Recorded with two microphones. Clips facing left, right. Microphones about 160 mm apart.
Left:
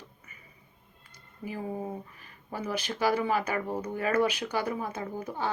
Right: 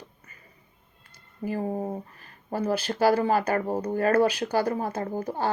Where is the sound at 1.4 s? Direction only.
45° right (ahead or behind).